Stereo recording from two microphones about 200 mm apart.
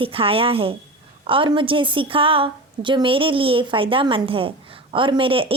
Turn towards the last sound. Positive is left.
turn(degrees=-25)  # may be behind; listen again after turning